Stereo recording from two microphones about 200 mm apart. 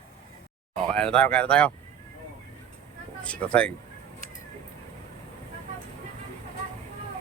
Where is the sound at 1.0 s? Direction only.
5° left (ahead or behind).